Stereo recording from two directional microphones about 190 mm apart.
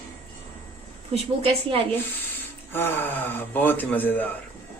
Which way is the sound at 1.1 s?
30° right (ahead or behind).